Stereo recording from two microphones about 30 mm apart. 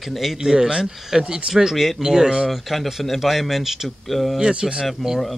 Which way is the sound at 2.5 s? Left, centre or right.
Centre.